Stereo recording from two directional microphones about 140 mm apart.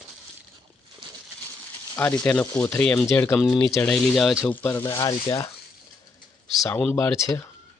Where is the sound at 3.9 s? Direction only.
Centre (ahead or behind).